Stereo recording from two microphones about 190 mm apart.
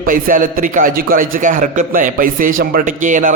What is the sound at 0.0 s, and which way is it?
A man's voice, 45° right (ahead or behind).